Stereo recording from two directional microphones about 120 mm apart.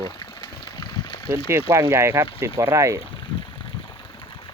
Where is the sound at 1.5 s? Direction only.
20° right (ahead or behind).